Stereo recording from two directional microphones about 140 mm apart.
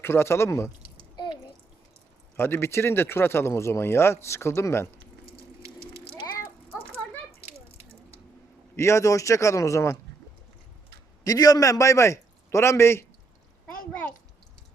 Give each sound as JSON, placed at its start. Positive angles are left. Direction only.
{"t": 0.0, "sound": "speech", "side_deg": 15}
{"t": 1.1, "sound": "a sound", "side_deg": 35}
{"t": 2.3, "sound": "speech", "side_deg": 15}
{"t": 8.7, "sound": "speech", "side_deg": 20}
{"t": 11.2, "sound": "a man's voice", "side_deg": 25}